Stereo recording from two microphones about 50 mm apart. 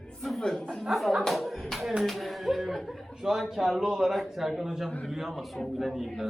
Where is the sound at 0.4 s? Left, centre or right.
Centre.